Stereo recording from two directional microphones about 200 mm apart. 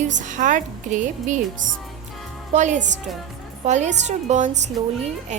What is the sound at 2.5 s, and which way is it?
A woman's voice, 35° right (ahead or behind).